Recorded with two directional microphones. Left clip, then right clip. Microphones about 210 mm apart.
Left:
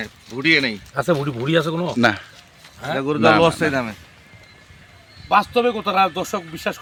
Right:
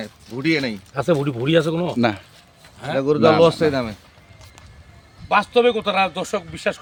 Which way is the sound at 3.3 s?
65° right (ahead or behind).